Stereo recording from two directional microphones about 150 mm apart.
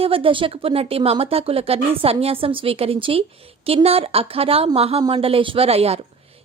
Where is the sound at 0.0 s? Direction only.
35° right (ahead or behind).